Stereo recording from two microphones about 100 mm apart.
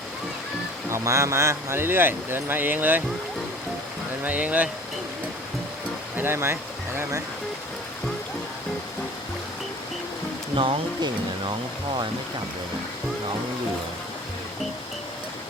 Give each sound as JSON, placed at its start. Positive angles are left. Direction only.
{"t": 0.9, "sound": "speech", "side_deg": -30}
{"t": 4.2, "sound": "speech", "side_deg": -15}
{"t": 6.1, "sound": "speech", "side_deg": -20}
{"t": 10.5, "sound": "speech", "side_deg": -55}